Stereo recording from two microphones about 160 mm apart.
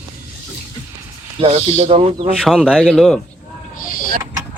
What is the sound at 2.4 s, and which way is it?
Speech, centre (ahead or behind).